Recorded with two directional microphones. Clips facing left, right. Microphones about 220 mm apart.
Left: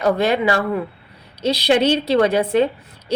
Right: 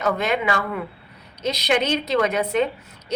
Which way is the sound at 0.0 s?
35° left (ahead or behind).